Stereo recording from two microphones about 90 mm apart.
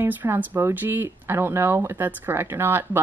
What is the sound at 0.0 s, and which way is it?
Speech, 25° right (ahead or behind).